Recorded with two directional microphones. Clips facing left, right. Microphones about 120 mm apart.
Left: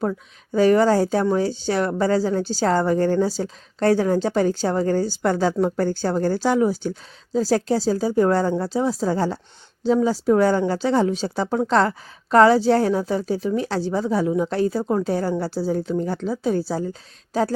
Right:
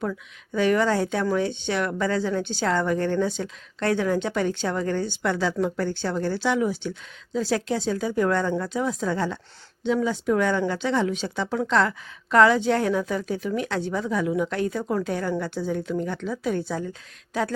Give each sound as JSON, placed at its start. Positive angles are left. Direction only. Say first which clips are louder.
{"t": 0.0, "sound": "speech", "louder": "left 5 dB", "side_deg": 35}